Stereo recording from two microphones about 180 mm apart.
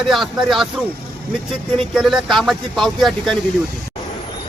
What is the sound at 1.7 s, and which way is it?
Speech, centre (ahead or behind).